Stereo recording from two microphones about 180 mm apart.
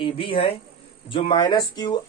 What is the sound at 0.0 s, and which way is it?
Speech, 30° left (ahead or behind).